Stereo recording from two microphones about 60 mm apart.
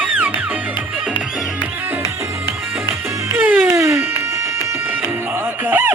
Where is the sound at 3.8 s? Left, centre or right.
Right.